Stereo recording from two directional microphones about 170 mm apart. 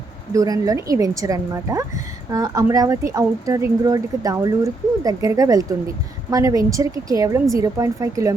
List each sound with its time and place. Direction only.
0.3 s speech: 20° right (ahead or behind)